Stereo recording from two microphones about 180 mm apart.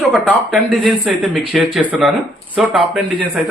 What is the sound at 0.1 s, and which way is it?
Speech, centre (ahead or behind).